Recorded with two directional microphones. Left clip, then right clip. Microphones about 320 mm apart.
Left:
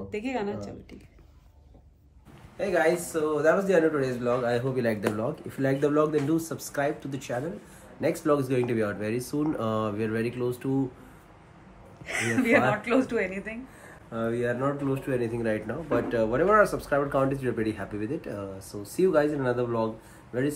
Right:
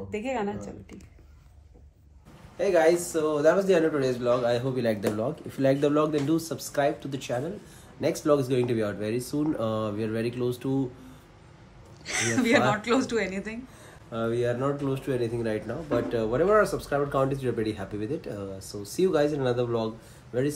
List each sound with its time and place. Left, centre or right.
0.1 s speech: centre
2.5 s speech: centre
12.1 s speech: centre